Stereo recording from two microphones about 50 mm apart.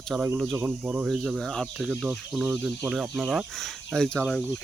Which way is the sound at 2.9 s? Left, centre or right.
Centre.